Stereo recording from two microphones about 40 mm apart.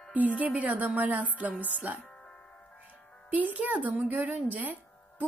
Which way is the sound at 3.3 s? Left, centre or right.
Right.